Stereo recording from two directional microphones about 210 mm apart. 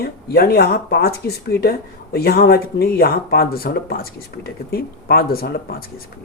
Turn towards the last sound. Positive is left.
turn(degrees=45)  # may be behind; listen again after turning